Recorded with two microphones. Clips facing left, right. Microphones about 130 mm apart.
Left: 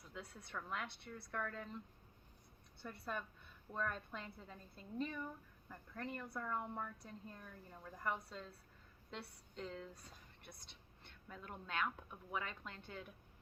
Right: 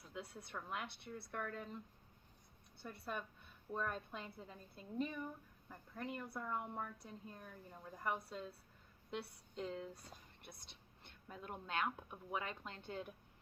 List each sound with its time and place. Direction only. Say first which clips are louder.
0.2 s a woman's voice: right 1 dB; 25° right (ahead or behind)
2.8 s a woman's voice: even; 15° right (ahead or behind)
11.0 s speech: right 2 dB; 20° right (ahead or behind)